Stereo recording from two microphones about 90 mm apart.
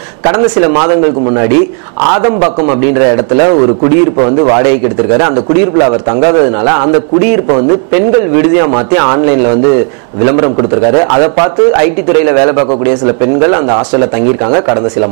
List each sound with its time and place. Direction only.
0.2 s a man's voice: 20° right (ahead or behind)